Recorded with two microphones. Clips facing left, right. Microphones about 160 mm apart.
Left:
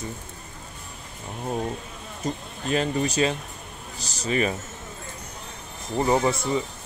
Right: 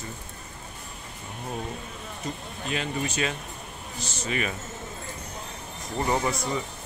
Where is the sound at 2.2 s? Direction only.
40° left (ahead or behind).